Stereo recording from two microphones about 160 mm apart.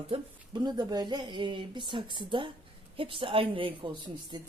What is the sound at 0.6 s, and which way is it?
A woman's voice, 25° right (ahead or behind).